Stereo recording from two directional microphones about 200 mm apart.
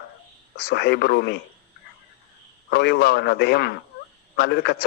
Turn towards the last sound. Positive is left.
turn(degrees=55)  # may be behind; listen again after turning